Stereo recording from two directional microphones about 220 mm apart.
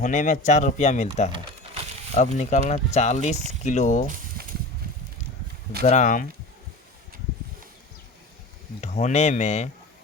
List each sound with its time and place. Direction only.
0.0 s speech: 35° left (ahead or behind)
5.8 s speech: 35° left (ahead or behind)
8.8 s speech: 30° left (ahead or behind)